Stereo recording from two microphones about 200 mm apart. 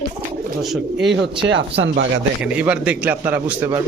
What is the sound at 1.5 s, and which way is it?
Speech, 65° right (ahead or behind).